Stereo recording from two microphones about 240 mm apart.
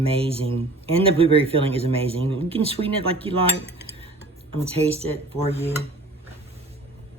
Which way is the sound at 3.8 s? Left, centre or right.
Right.